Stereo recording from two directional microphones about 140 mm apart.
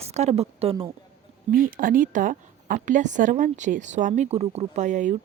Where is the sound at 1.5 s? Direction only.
85° right.